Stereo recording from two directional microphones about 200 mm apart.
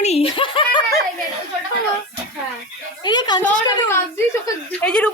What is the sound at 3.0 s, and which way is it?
Speech, 20° left (ahead or behind).